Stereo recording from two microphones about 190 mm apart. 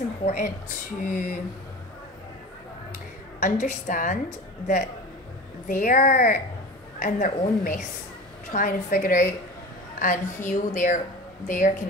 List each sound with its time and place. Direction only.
0.2 s a woman's voice: 40° left (ahead or behind)
3.3 s a woman's voice: 40° left (ahead or behind)
5.7 s a woman's voice: 45° left (ahead or behind)